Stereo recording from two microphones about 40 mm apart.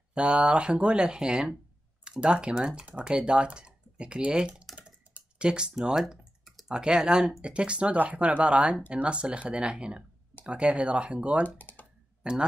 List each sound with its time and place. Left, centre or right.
0.1 s speech: right
5.9 s typing: centre
6.7 s speech: right
11.4 s speech: left
12.2 s speech: right